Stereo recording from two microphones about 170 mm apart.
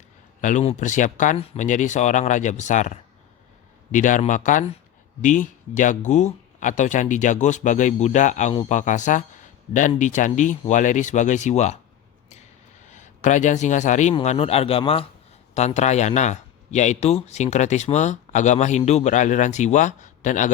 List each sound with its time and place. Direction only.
0.4 s speech: 40° left (ahead or behind)
12.9 s speech: 45° left (ahead or behind)